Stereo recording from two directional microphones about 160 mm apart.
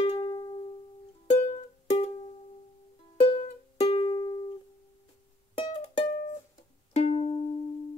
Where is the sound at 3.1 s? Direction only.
35° left (ahead or behind).